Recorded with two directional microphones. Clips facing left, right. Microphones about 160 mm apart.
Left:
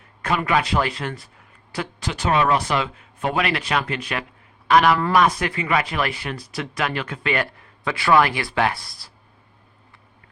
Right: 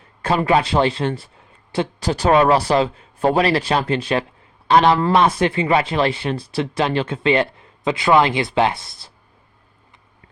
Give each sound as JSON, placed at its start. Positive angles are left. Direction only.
{"t": 0.2, "sound": "a man's voice", "side_deg": -30}